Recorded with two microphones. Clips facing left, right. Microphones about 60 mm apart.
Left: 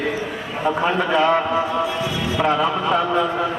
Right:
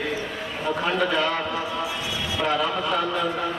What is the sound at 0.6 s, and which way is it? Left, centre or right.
A man's voice, left.